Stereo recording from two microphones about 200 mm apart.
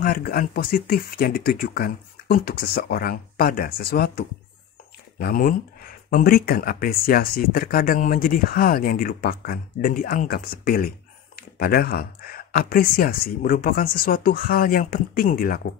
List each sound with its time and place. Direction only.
0.0 s speech: 50° left (ahead or behind)
5.2 s speech: 45° left (ahead or behind)